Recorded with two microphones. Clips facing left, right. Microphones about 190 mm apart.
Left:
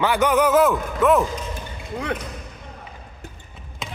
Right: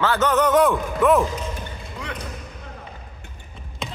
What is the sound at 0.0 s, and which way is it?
A man's voice, 15° left (ahead or behind).